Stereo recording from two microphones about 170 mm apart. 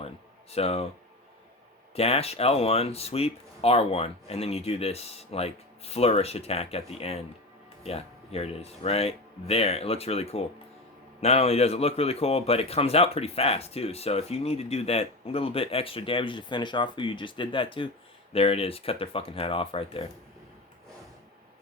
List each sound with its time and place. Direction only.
0.5 s a man's voice: 35° left (ahead or behind)
2.0 s a man's voice: 35° left (ahead or behind)